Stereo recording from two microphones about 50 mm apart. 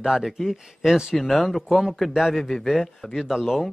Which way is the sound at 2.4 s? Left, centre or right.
Centre.